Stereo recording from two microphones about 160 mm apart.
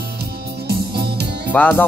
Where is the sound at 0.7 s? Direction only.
80° right.